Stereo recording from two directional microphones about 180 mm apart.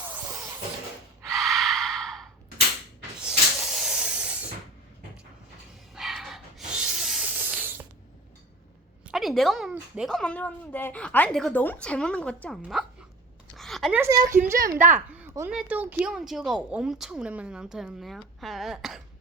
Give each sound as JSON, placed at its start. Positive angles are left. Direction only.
{"t": 0.3, "sound": "music", "side_deg": -15}
{"t": 1.3, "sound": "gasp", "side_deg": 0}
{"t": 3.2, "sound": "rub", "side_deg": -5}
{"t": 5.9, "sound": "a sound", "side_deg": 0}
{"t": 9.1, "sound": "a woman's voice", "side_deg": 0}
{"t": 13.6, "sound": "a sound", "side_deg": 0}
{"t": 13.9, "sound": "a woman's voice", "side_deg": -15}